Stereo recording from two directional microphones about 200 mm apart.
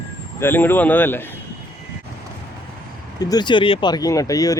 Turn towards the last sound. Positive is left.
turn(degrees=15)  # may be behind; listen again after turning